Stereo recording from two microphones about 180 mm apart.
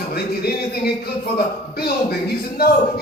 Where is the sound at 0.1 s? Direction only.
60° left (ahead or behind).